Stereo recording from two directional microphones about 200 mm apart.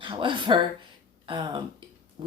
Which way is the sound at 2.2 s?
25° right (ahead or behind).